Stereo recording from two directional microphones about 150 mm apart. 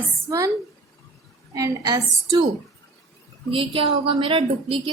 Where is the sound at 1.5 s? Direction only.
25° right (ahead or behind).